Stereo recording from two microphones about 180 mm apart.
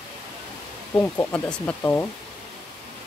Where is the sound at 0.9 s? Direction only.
15° left (ahead or behind).